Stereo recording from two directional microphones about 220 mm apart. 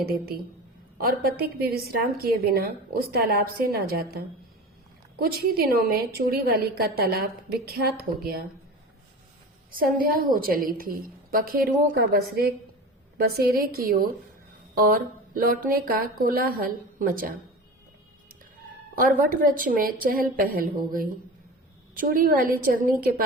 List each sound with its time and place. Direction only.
0.0 s a woman's voice: 45° right (ahead or behind)
5.2 s a woman's voice: 45° right (ahead or behind)
9.7 s a woman's voice: 40° right (ahead or behind)
15.4 s a woman's voice: 40° right (ahead or behind)
18.9 s a woman's voice: 40° right (ahead or behind)